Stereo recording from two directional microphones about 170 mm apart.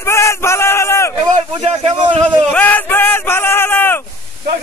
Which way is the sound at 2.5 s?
10° left (ahead or behind).